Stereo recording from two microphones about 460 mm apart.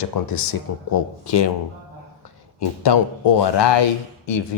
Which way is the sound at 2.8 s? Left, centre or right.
Left.